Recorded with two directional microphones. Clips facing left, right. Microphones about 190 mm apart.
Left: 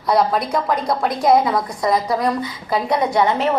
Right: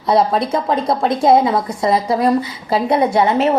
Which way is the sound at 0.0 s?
25° right (ahead or behind).